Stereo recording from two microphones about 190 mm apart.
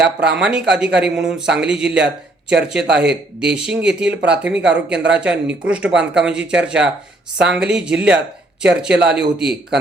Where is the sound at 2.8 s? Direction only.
65° right (ahead or behind).